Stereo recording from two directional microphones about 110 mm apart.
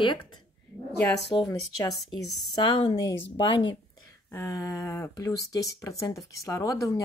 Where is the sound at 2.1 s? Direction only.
45° left (ahead or behind).